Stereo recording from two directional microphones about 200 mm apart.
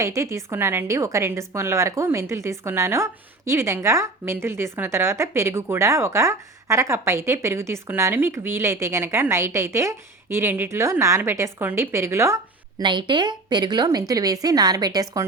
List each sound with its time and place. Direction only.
0.0 s a woman's voice: 15° right (ahead or behind)